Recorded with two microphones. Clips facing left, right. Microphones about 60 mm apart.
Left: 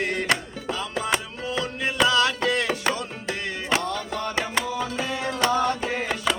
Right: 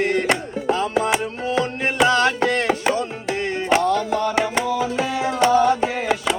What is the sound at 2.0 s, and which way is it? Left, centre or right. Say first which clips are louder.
Carnatic music: right 4 dB; right.